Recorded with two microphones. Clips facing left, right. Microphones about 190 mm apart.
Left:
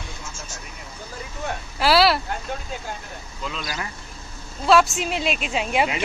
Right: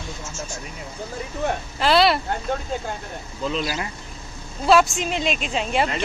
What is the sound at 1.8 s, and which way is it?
Speech, 5° left (ahead or behind).